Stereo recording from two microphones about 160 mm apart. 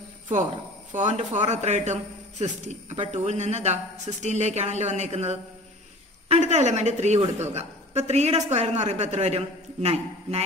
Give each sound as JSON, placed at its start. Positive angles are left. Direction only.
{"t": 0.9, "sound": "a woman's voice", "side_deg": -50}